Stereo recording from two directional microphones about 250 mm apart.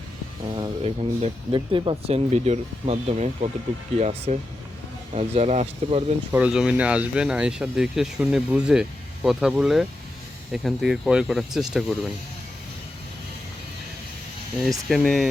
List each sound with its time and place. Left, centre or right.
0.5 s speech: right
6.3 s speech: centre
14.6 s speech: centre